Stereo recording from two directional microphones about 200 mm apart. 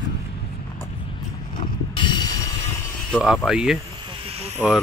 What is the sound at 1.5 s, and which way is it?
Mechanisms, 25° left (ahead or behind).